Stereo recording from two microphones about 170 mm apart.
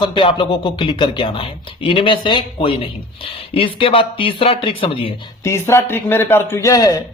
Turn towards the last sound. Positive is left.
turn(degrees=20)  # may be behind; listen again after turning